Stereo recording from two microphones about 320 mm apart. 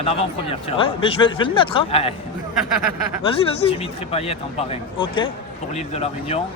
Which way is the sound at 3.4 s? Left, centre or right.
Centre.